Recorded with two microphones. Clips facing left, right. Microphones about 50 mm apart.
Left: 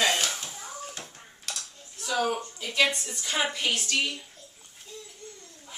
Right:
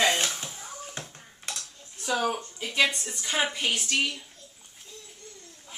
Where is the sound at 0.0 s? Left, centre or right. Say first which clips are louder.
Right 1 dB; right.